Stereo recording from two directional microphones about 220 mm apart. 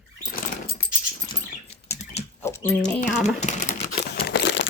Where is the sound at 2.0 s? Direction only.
30° left (ahead or behind).